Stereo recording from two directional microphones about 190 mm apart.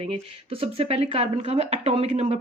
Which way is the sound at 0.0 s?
30° right (ahead or behind).